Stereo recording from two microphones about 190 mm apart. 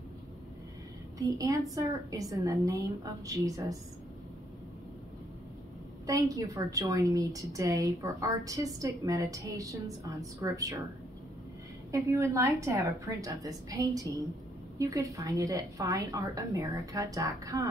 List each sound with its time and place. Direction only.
1.1 s a woman's voice: 20° right (ahead or behind)
6.0 s a woman's voice: 15° right (ahead or behind)
11.9 s a woman's voice: 15° right (ahead or behind)